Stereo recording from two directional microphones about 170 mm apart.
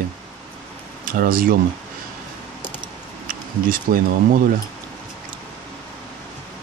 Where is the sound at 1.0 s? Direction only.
55° right (ahead or behind).